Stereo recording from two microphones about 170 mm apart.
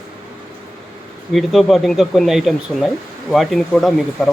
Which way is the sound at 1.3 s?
Centre (ahead or behind).